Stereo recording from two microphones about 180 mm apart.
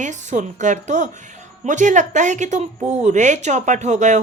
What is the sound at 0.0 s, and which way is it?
A woman's voice, 40° right (ahead or behind).